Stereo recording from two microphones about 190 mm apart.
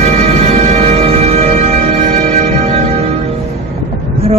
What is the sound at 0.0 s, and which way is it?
Music, 35° right (ahead or behind).